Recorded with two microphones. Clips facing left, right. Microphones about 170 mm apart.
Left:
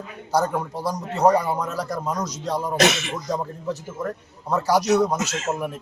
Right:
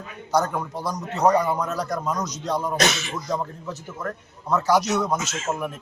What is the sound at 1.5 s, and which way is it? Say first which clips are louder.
Speech: right 1 dB; 10° left (ahead or behind).